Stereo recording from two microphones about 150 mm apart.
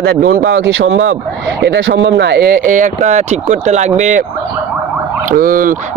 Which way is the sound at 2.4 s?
75° right (ahead or behind).